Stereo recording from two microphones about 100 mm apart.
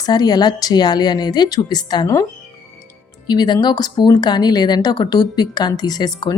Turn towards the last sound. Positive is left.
turn(degrees=45)  # may be behind; listen again after turning